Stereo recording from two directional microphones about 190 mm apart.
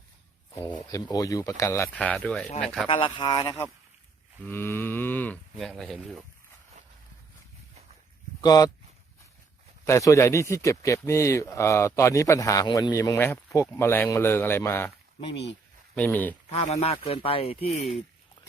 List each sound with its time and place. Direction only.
0.7 s a man's voice: 20° left (ahead or behind); by 2.8 s centre (ahead or behind)
2.8 s speech: 30° left (ahead or behind)
4.4 s a man's voice: 10° left (ahead or behind)
8.4 s speech: 20° left (ahead or behind)
9.8 s a man's voice: 15° left (ahead or behind)
16.0 s a man's voice: 10° left (ahead or behind)
16.5 s speech: 30° left (ahead or behind)